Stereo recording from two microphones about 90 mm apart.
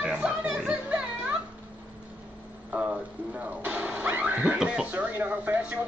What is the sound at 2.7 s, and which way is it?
Speech, 15° right (ahead or behind).